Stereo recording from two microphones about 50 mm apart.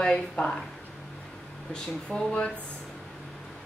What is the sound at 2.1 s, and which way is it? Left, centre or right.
Speech, left.